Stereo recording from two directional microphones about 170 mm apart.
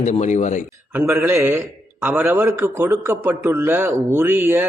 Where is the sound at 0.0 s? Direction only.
45° left (ahead or behind).